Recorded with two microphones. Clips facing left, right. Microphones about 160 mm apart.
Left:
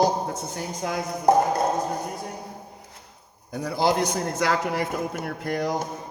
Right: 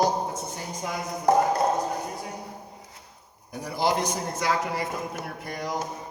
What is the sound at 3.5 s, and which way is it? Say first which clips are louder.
A man's voice: left 3 dB; 60° left (ahead or behind).